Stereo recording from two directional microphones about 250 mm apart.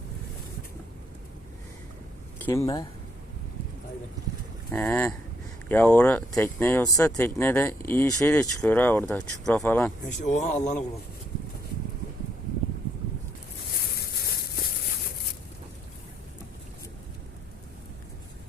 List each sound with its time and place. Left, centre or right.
2.4 s speech: centre
4.7 s speech: centre
10.2 s speech: left